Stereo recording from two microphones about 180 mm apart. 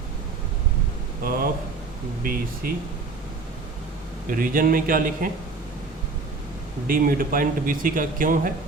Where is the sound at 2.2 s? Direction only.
50° right (ahead or behind).